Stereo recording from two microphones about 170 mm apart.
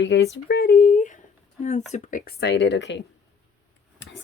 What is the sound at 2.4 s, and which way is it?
Speech, 90° left.